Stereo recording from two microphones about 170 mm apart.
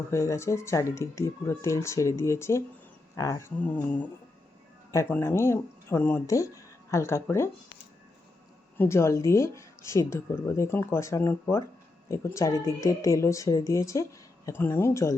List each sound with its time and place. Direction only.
0.1 s a woman's voice: 15° left (ahead or behind)
8.8 s a woman's voice: 15° left (ahead or behind)